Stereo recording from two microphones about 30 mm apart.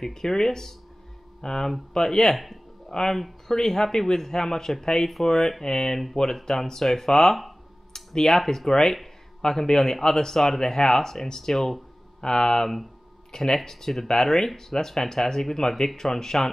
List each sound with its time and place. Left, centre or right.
0.0 s speech: centre
2.3 s speech: centre
2.9 s speech: centre
7.9 s a sound: centre
8.5 s speech: centre